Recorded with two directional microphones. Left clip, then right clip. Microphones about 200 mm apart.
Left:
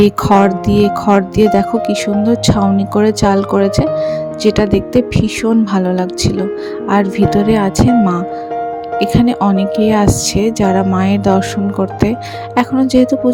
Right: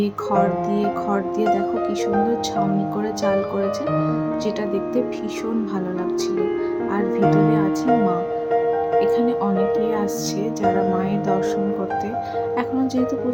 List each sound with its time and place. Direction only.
0.0 s speech: 45° left (ahead or behind)
12.5 s speech: 40° left (ahead or behind)